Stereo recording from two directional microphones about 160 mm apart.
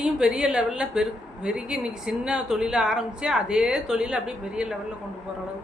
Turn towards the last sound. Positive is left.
turn(degrees=-5)  # may be behind; listen again after turning